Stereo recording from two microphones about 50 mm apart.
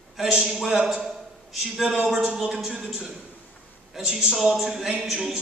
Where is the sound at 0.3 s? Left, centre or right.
Centre.